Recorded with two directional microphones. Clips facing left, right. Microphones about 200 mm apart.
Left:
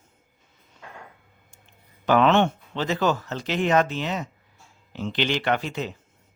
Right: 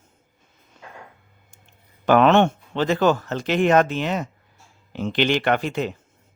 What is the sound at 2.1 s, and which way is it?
A man's voice, 55° right (ahead or behind).